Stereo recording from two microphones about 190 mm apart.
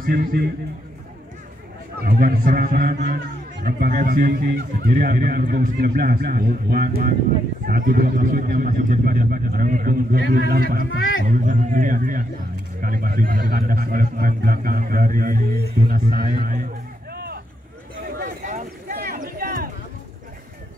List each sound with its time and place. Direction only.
0.0 s a man's voice: 50° right (ahead or behind)
2.0 s a man's voice: 50° right (ahead or behind)
17.1 s vehicle: 55° right (ahead or behind)
18.2 s a sound: 45° right (ahead or behind)